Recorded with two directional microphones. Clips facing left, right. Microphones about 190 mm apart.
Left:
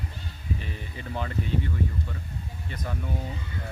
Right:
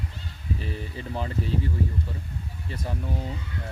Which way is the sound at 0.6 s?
35° right (ahead or behind).